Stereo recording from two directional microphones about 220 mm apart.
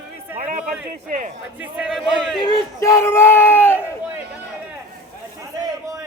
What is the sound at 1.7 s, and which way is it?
Speech, 5° right (ahead or behind).